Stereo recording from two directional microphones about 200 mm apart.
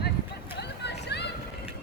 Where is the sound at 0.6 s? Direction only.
55° left (ahead or behind).